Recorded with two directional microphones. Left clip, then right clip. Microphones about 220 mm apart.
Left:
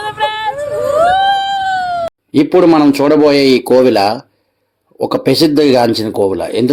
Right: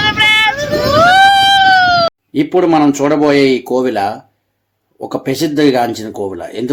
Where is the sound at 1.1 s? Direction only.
5° right (ahead or behind).